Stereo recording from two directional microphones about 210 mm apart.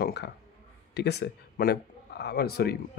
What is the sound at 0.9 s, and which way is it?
A man's voice, 50° left (ahead or behind).